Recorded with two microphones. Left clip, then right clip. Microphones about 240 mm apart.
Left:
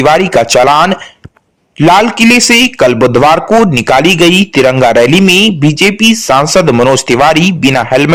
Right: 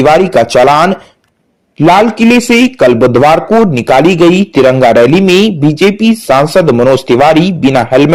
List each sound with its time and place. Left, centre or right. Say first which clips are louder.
0.0 s a man's voice: right 1 dB; left